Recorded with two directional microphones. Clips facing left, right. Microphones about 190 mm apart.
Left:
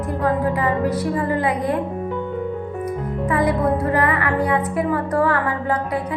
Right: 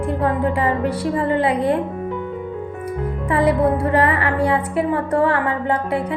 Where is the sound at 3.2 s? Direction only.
30° right (ahead or behind).